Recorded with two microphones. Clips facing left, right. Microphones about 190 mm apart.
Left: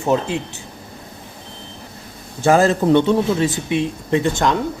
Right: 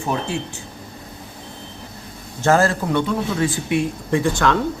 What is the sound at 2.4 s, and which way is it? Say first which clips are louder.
Speech: left 2 dB; 15° left (ahead or behind).